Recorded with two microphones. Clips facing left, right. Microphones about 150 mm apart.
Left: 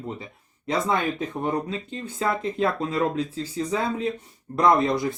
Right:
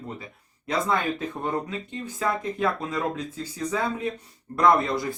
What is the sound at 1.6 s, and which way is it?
Speech, 30° left (ahead or behind).